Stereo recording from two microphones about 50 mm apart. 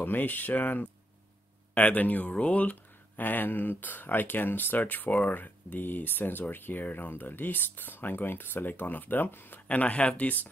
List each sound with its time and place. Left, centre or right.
0.0 s speech: left
9.7 s speech: left